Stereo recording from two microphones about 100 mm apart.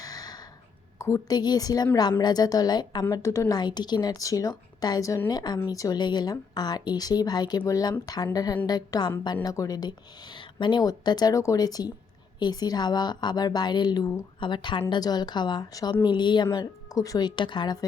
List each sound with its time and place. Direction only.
0.0 s a sound: 40° left (ahead or behind)
0.9 s a woman's voice: 30° left (ahead or behind)
3.2 s a woman's voice: 30° left (ahead or behind)
3.5 s a woman's voice: 45° left (ahead or behind)
5.3 s a woman's voice: 45° left (ahead or behind)
10.3 s a woman's voice: 50° left (ahead or behind)